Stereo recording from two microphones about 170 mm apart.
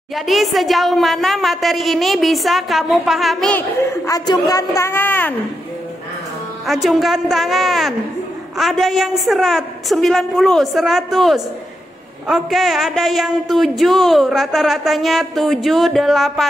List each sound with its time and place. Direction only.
0.1 s a woman's voice: centre (ahead or behind)
3.9 s a woman's voice: 20° left (ahead or behind)
6.6 s a woman's voice: centre (ahead or behind)